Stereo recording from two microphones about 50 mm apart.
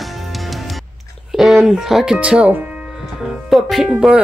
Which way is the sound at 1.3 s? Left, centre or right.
Centre.